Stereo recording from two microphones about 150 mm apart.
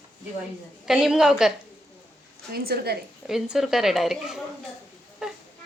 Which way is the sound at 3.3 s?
Centre (ahead or behind).